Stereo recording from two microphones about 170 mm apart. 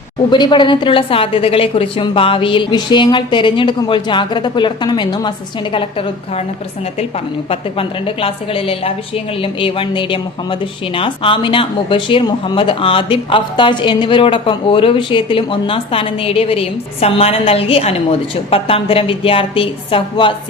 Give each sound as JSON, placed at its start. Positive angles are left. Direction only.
{"t": 0.3, "sound": "a woman's voice", "side_deg": 25}
{"t": 7.5, "sound": "a woman's voice", "side_deg": 30}